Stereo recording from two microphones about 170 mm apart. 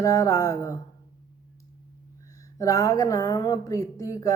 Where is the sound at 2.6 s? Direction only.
20° left (ahead or behind).